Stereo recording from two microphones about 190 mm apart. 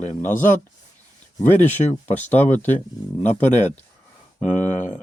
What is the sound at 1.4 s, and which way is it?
Speech, 10° left (ahead or behind).